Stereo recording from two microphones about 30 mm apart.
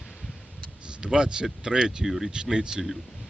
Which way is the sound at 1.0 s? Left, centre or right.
Right.